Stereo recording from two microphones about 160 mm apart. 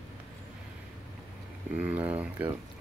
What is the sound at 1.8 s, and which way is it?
Speech, 10° right (ahead or behind).